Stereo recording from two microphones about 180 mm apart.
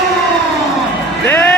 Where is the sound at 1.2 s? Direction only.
10° left (ahead or behind).